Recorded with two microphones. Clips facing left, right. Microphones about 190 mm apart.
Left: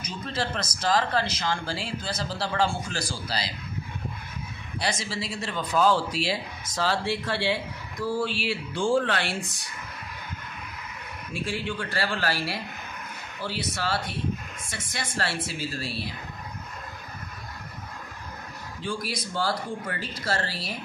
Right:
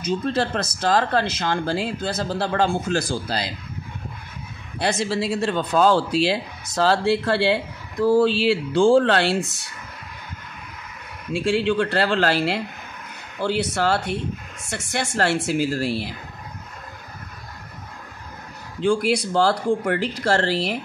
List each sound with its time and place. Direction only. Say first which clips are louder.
0.3 s speech: right 7 dB; 60° right (ahead or behind)
4.7 s speech: right 8 dB; 60° right (ahead or behind)
8.5 s speech: right 10 dB; 90° right
9.0 s a man's voice: right 9 dB; 70° right (ahead or behind)
11.3 s a man's voice: right 11 dB; 85° right; by 14.0 s 65° right (ahead or behind)
14.7 s a man's voice: right 9 dB; 75° right (ahead or behind)
18.8 s speech: right 13 dB; 85° right